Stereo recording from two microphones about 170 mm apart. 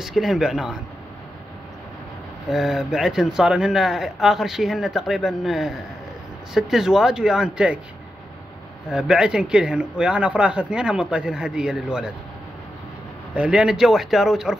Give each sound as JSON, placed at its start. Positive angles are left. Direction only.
{"t": 0.0, "sound": "speech", "side_deg": 0}
{"t": 2.5, "sound": "speech", "side_deg": 0}
{"t": 8.9, "sound": "speech", "side_deg": -5}
{"t": 13.3, "sound": "speech", "side_deg": -5}